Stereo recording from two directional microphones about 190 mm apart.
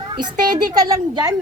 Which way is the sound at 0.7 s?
20° right (ahead or behind).